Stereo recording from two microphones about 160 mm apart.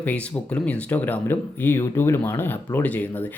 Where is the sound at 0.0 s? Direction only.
10° left (ahead or behind).